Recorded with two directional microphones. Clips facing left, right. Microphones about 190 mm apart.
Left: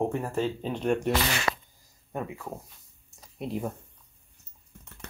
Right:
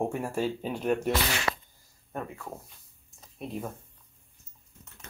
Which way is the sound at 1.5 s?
75° left (ahead or behind).